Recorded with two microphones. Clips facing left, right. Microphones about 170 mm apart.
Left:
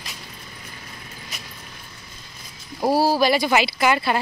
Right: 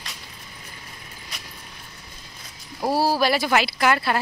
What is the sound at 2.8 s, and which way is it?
A woman's voice, centre (ahead or behind).